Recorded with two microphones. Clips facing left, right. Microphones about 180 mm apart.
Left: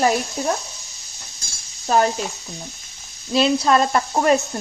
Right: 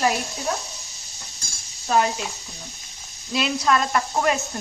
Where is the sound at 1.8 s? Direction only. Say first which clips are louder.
Left 3 dB; 40° left (ahead or behind).